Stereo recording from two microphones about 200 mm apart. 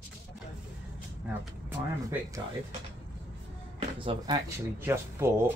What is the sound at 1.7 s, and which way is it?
Speech, 15° right (ahead or behind).